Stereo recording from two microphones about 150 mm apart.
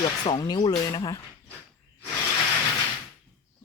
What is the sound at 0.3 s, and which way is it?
Speech, 30° left (ahead or behind).